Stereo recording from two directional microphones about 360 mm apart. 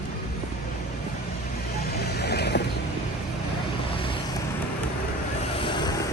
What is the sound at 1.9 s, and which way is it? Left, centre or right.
Vehicle, left.